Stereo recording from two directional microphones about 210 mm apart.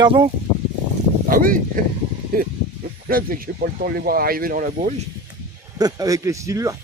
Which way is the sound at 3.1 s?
45° right (ahead or behind).